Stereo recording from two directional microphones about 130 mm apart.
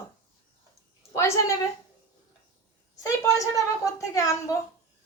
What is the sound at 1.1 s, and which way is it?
Speech, 25° left (ahead or behind).